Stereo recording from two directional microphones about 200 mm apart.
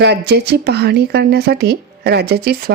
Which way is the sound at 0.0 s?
55° right (ahead or behind).